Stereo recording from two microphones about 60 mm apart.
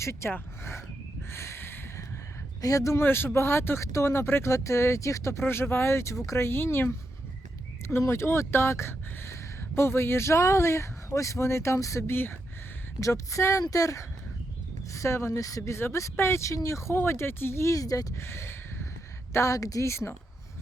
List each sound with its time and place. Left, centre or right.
0.0 s speech: left
1.3 s a sound: left
2.6 s speech: left
4.5 s speech: left
6.4 s speech: left
12.1 s speech: left
13.0 s speech: left
14.9 s speech: left
15.7 s speech: left
16.9 s speech: left
17.7 s speech: left
18.2 s speech: left
19.3 s speech: left
19.9 s speech: left